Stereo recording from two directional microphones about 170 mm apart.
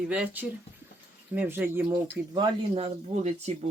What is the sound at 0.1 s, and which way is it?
Speech, 5° right (ahead or behind).